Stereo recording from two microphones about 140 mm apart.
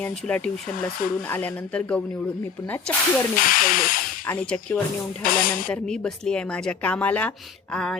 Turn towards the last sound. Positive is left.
turn(degrees=5)  # may be behind; listen again after turning